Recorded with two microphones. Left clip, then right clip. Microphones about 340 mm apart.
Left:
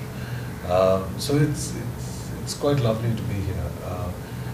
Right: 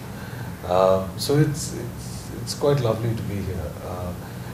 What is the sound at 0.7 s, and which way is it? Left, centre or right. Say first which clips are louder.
Speech: right 1 dB; right.